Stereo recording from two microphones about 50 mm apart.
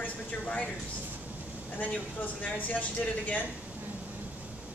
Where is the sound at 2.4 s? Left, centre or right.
Left.